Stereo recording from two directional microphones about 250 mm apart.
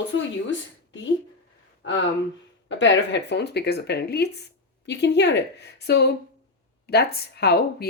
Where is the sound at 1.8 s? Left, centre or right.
Left.